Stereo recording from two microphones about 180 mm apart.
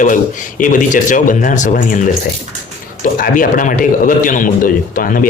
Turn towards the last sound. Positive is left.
turn(degrees=50)  # may be behind; listen again after turning